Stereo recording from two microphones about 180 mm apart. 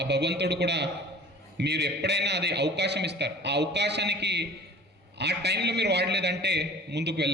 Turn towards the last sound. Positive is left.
turn(degrees=-70)  # may be behind; listen again after turning